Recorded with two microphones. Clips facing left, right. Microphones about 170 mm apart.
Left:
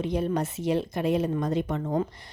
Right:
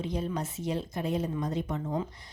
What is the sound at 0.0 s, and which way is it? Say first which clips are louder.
A woman's voice: left 6 dB; 65° left (ahead or behind).